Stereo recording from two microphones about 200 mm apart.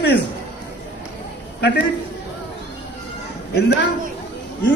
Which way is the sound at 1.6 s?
60° left (ahead or behind).